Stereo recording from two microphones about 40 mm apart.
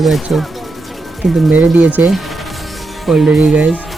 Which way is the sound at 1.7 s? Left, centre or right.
Right.